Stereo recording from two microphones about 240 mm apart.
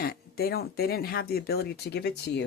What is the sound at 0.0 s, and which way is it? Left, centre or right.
Speech, left.